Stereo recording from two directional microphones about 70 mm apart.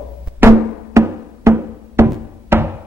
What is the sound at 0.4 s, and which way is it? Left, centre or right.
Music, right.